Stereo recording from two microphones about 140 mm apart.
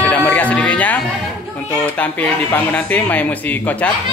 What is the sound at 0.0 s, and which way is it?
Music, 10° left (ahead or behind).